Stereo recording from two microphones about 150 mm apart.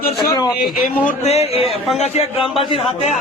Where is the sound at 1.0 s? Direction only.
45° left (ahead or behind).